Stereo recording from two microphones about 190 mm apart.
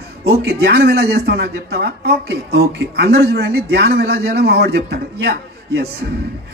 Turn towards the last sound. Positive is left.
turn(degrees=-55)  # may be behind; listen again after turning